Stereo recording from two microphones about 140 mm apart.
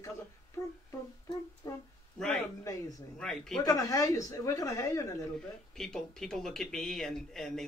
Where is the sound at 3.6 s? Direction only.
25° left (ahead or behind).